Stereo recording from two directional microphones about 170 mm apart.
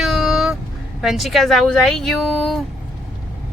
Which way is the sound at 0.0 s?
Centre (ahead or behind).